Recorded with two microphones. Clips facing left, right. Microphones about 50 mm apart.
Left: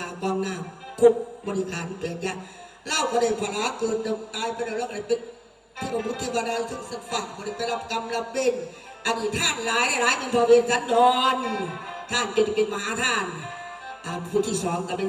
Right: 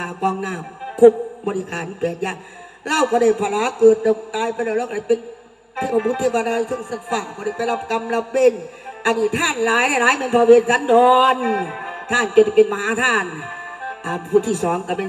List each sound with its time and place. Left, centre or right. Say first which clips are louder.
0.0 s a man's voice: right 5 dB; right